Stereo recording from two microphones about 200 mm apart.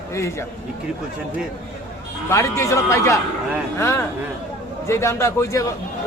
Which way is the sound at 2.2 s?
15° left (ahead or behind).